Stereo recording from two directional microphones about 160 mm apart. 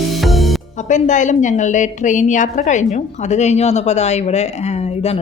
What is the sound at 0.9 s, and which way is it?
A woman's voice, 50° left (ahead or behind).